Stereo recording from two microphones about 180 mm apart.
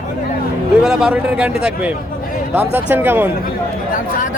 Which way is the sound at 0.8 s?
5° right (ahead or behind).